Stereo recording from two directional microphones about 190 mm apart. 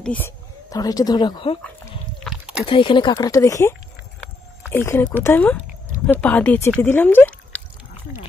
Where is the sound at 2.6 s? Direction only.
25° left (ahead or behind); by 7.6 s 10° left (ahead or behind).